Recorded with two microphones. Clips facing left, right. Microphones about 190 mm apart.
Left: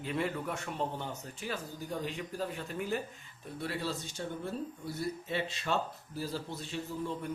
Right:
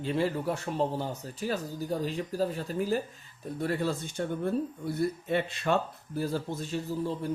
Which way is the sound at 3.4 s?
45° right (ahead or behind).